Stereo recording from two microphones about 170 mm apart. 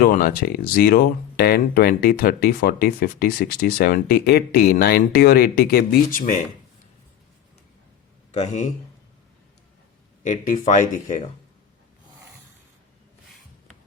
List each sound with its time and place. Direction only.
0.0 s speech: 55° left (ahead or behind)
8.3 s a man's voice: 45° left (ahead or behind)
10.2 s speech: 45° left (ahead or behind)